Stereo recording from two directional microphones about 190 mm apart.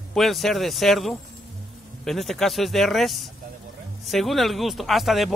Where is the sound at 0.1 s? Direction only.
Centre (ahead or behind).